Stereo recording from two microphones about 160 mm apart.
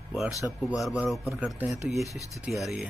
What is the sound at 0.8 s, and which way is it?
A man's voice, 5° right (ahead or behind).